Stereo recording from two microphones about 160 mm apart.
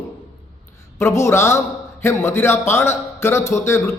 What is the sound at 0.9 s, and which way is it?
Speech, 15° left (ahead or behind).